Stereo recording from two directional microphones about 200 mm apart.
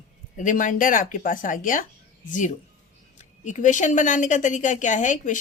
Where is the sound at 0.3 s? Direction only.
40° left (ahead or behind).